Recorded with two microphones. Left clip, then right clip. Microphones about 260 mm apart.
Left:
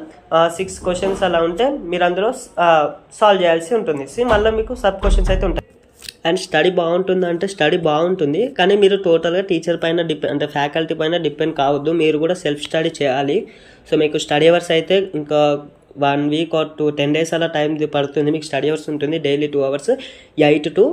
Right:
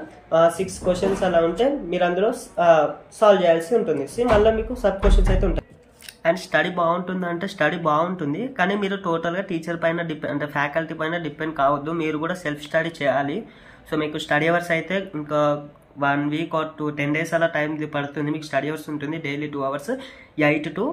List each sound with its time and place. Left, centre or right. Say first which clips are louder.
0.3 s speech: left 2 dB; centre